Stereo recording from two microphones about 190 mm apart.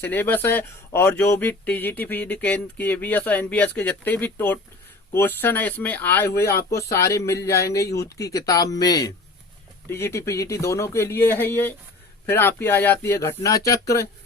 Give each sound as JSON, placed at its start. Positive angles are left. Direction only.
{"t": 0.0, "sound": "speech", "side_deg": 10}